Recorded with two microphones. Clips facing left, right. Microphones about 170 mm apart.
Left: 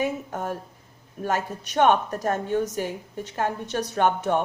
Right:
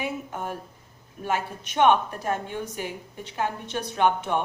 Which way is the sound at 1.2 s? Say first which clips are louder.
Left 2 dB; 40° left (ahead or behind).